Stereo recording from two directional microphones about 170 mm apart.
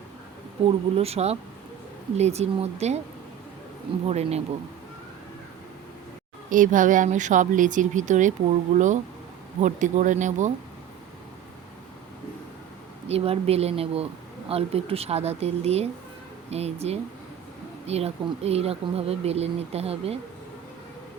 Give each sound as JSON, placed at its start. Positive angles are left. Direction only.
{"t": 0.9, "sound": "speech", "side_deg": -35}
{"t": 4.0, "sound": "speech", "side_deg": -40}
{"t": 6.5, "sound": "speech", "side_deg": -50}
{"t": 13.1, "sound": "speech", "side_deg": -35}